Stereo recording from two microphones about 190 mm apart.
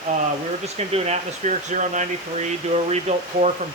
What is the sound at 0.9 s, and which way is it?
Speech, 35° right (ahead or behind).